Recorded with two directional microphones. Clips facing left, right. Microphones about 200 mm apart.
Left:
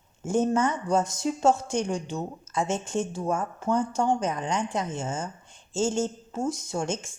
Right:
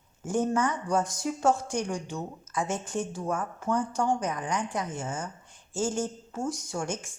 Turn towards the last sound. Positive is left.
turn(degrees=25)  # may be behind; listen again after turning